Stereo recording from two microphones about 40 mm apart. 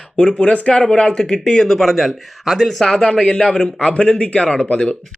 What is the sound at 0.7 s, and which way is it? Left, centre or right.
Speech, centre.